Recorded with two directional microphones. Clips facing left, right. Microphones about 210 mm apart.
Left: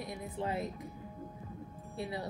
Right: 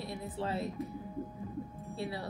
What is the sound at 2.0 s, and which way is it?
Speech, 20° left (ahead or behind).